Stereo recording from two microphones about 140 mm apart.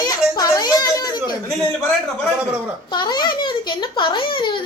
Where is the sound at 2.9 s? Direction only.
30° left (ahead or behind).